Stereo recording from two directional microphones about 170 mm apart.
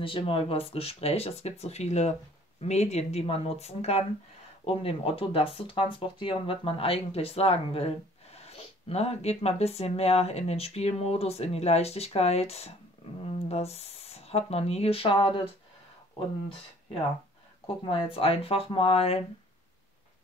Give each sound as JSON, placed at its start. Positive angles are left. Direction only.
{"t": 0.0, "sound": "speech", "side_deg": 30}
{"t": 17.8, "sound": "speech", "side_deg": 35}